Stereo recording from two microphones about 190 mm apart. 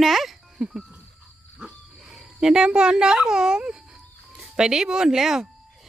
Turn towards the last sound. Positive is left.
turn(degrees=0)  # may be behind; listen again after turning